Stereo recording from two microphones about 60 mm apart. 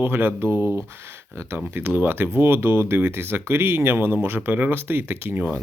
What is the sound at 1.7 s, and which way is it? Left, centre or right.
Speech, right.